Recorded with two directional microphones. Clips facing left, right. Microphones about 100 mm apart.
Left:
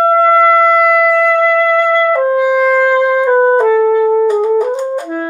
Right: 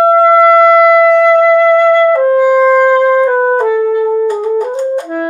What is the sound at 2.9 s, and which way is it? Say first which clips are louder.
Music: right 2 dB; 10° left (ahead or behind).